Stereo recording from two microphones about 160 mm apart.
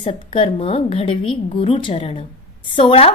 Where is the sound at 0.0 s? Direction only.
35° left (ahead or behind).